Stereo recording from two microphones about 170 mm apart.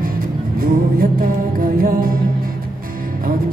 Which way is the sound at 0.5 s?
55° right (ahead or behind).